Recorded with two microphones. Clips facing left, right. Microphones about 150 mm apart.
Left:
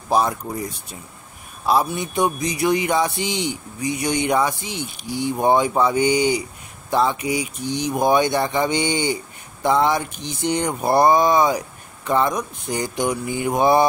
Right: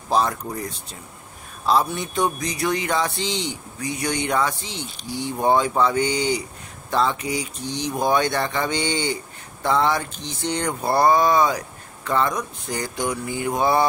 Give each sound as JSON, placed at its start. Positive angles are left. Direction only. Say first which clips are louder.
{"t": 0.1, "sound": "a man's voice", "louder": "left 2 dB", "side_deg": 10}
{"t": 1.7, "sound": "a man's voice", "louder": "left 1 dB", "side_deg": 10}